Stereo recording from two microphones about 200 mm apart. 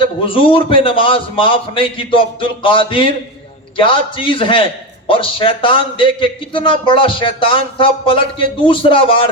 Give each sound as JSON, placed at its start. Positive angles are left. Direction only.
{"t": 0.0, "sound": "a man's voice", "side_deg": 25}